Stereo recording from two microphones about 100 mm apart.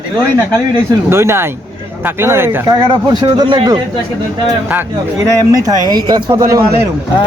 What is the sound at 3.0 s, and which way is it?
Speech, 40° right (ahead or behind).